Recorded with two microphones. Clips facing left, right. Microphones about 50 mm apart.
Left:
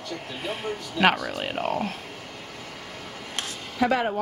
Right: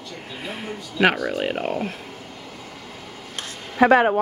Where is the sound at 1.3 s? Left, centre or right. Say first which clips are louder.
Right 3 dB; centre.